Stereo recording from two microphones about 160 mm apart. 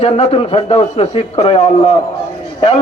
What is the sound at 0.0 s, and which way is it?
A man's voice, 40° left (ahead or behind).